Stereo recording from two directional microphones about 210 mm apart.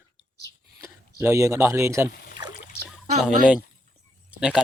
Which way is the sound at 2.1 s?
45° left (ahead or behind).